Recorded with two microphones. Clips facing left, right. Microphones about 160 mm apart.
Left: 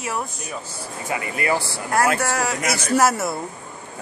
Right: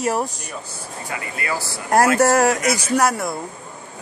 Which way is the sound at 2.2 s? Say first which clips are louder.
Right 8 dB; 45° right (ahead or behind).